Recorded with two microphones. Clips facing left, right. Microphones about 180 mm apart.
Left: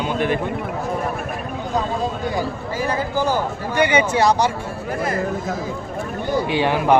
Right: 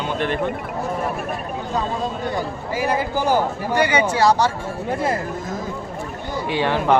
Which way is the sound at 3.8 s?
20° left (ahead or behind).